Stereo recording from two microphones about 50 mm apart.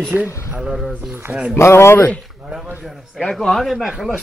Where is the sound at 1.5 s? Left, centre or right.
Left.